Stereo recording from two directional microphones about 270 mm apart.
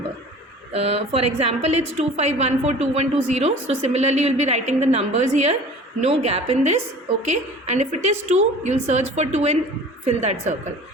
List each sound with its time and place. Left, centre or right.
0.7 s a woman's voice: right